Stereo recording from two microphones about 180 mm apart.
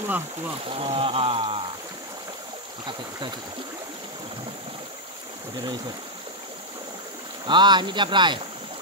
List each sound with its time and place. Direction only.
0.7 s speech: 30° right (ahead or behind)
7.4 s speech: 25° right (ahead or behind)